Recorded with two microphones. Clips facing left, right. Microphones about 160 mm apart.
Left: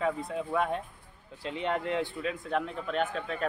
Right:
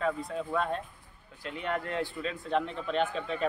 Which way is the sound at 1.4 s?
25° left (ahead or behind).